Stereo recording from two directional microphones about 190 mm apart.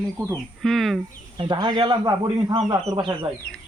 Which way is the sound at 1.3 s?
25° right (ahead or behind).